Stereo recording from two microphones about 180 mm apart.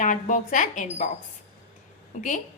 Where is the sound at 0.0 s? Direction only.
45° left (ahead or behind).